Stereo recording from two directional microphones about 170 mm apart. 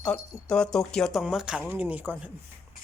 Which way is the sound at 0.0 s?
5° left (ahead or behind).